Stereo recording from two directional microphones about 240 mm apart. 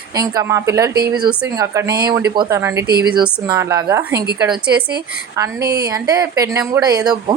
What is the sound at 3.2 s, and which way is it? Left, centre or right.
Speech, centre.